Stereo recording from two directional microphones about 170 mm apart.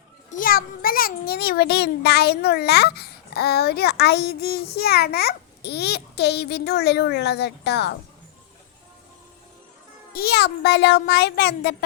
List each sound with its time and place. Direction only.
0.3 s a child's voice: 55° left (ahead or behind); by 7.9 s 85° left
10.1 s a child's voice: 65° left (ahead or behind)